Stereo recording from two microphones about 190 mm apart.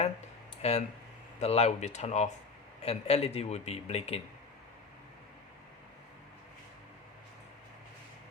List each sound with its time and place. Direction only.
0.6 s speech: 35° left (ahead or behind)